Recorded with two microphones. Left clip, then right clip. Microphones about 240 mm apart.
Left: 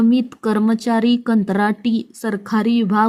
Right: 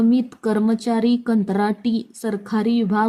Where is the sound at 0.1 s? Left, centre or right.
Centre.